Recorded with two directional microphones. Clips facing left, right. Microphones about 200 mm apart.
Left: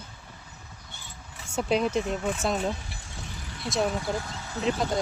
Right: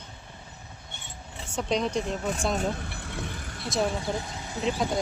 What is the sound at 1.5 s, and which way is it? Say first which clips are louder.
Speech: left 2 dB; 5° left (ahead or behind).